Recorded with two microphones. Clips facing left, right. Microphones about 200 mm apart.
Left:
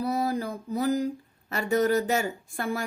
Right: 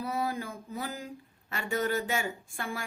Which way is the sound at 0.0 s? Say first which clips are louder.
Left 6 dB; 40° left (ahead or behind).